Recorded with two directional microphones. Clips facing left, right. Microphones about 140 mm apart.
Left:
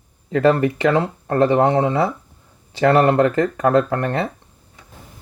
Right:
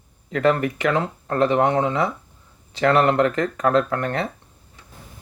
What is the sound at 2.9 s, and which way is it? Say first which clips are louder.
Speech: left 3 dB; 30° left (ahead or behind).